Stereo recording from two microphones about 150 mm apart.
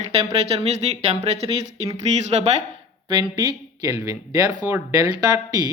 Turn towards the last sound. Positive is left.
turn(degrees=-25)  # may be behind; listen again after turning